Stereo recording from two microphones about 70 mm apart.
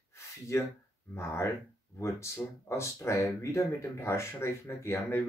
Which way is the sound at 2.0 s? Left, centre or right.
Left.